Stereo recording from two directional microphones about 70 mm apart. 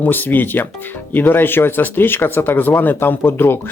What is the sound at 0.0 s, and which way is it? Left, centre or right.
Speech, left.